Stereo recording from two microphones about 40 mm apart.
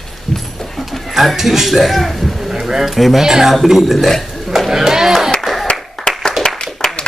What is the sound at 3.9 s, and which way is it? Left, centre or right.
Speech, centre.